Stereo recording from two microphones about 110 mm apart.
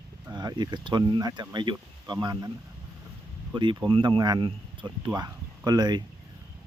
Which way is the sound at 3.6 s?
45° right (ahead or behind).